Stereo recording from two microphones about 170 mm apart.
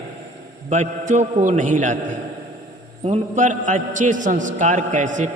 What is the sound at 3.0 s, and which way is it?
A man's voice, 40° right (ahead or behind).